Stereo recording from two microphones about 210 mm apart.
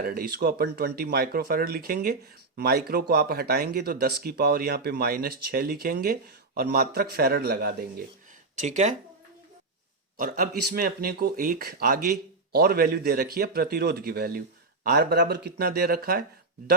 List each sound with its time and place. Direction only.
0.0 s speech: 45° right (ahead or behind)
8.6 s speech: 35° right (ahead or behind)
10.2 s speech: 45° right (ahead or behind)